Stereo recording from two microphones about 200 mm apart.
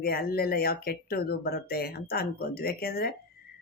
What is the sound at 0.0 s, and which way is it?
Speech, 50° left (ahead or behind).